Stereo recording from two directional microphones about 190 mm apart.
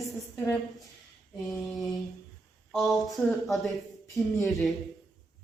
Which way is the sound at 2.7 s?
Centre (ahead or behind).